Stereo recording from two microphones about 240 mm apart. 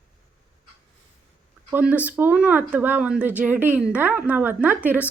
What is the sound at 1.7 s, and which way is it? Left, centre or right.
Speech, centre.